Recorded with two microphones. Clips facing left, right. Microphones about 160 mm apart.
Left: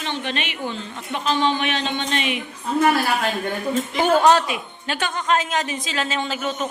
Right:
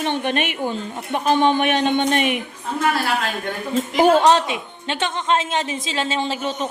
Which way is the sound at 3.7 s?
30° right (ahead or behind).